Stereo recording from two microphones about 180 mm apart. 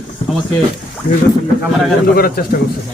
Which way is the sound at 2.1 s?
55° left (ahead or behind).